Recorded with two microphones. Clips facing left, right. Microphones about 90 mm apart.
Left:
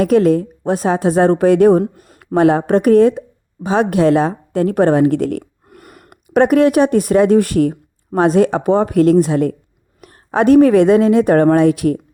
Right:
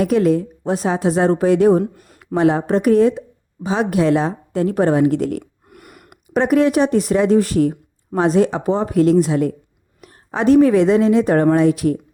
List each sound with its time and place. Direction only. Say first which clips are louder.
0.0 s a woman's voice: left 3 dB; 50° left (ahead or behind)
1.8 s speech: left 2 dB; 30° left (ahead or behind)
2.1 s speech: left 3 dB; 55° left (ahead or behind)
5.4 s a sound: left 2 dB; 35° left (ahead or behind)
6.3 s speech: left 4 dB; 60° left (ahead or behind)